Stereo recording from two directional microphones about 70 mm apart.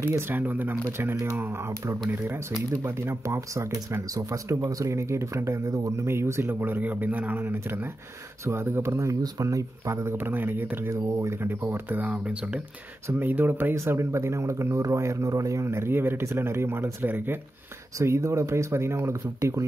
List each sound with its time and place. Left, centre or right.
0.2 s speech: right
6.6 s speech: right
10.9 s speech: right; by 12.6 s centre
13.2 s speech: right
13.7 s speech: right
17.9 s speech: right